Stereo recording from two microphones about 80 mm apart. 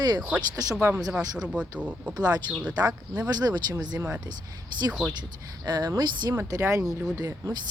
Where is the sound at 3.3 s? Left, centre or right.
Right.